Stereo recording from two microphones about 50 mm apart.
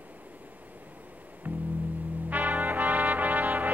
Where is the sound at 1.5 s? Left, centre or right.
Right.